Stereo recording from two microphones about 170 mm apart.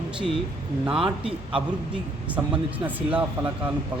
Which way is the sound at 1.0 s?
35° right (ahead or behind).